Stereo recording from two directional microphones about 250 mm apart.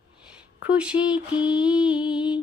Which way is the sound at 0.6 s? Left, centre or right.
Centre.